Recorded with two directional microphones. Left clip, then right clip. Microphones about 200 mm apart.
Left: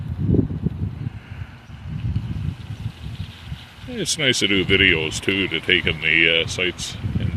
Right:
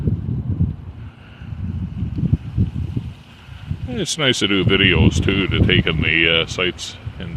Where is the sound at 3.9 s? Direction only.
20° right (ahead or behind).